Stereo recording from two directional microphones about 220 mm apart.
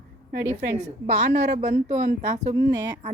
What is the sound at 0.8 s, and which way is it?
A woman's voice, 30° right (ahead or behind).